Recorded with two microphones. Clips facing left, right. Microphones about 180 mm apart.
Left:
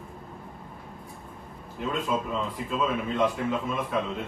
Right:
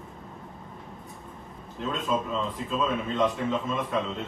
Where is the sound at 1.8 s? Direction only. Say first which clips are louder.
Even; 5° left (ahead or behind).